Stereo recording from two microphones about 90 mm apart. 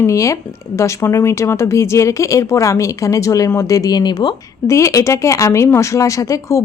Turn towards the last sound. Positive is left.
turn(degrees=40)  # may be behind; listen again after turning